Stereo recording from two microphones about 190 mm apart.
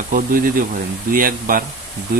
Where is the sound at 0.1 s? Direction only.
45° right (ahead or behind).